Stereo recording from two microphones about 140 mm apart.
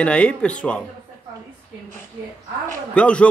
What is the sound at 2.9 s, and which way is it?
Speech, 10° left (ahead or behind).